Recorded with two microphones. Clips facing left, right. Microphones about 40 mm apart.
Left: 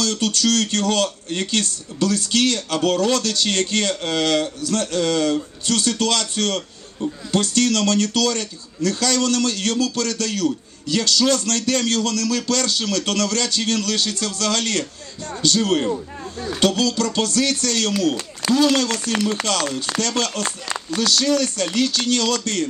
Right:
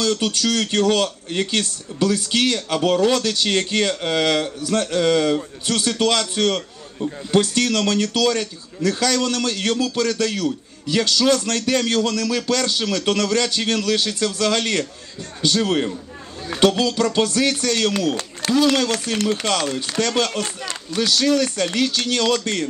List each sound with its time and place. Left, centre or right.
0.2 s speech: centre
20.4 s speech: left
21.0 s speech: centre